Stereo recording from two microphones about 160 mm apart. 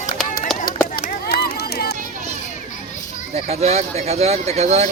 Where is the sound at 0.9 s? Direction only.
75° left (ahead or behind).